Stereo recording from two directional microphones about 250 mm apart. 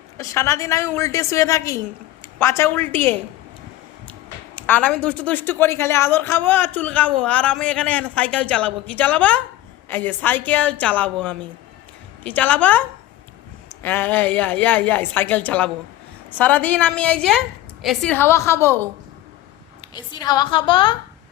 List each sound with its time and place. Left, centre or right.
0.2 s a woman's voice: centre
4.5 s a woman's voice: centre
12.2 s a woman's voice: centre
13.8 s a woman's voice: centre
19.9 s a woman's voice: centre